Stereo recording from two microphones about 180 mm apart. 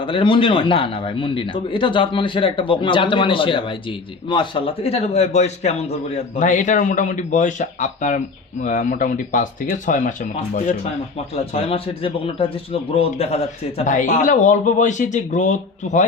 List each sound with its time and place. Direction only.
0.0 s a man's voice: 25° left (ahead or behind); by 10.8 s 45° left (ahead or behind)
11.5 s a man's voice: 30° left (ahead or behind)